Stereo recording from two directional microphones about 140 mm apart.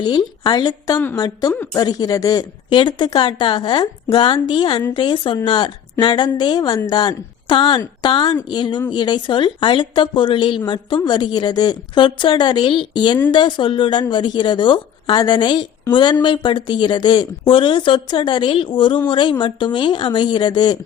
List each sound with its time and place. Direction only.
0.4 s a woman's voice: 30° left (ahead or behind)